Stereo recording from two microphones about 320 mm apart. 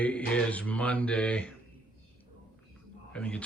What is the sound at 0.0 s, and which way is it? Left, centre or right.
Speech, centre.